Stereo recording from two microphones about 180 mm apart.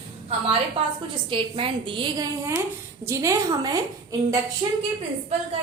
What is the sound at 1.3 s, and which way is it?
A woman's voice, 30° right (ahead or behind).